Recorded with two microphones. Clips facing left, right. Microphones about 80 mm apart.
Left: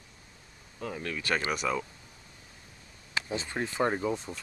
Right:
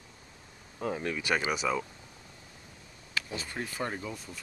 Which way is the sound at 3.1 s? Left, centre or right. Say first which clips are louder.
Left 3 dB; left.